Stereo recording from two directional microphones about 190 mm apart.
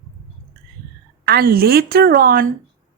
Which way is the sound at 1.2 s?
55° right (ahead or behind).